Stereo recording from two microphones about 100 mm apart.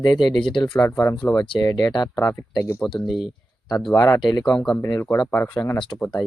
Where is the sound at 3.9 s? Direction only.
35° left (ahead or behind).